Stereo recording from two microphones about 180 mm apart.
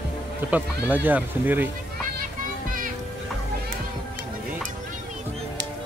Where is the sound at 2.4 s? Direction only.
50° right (ahead or behind).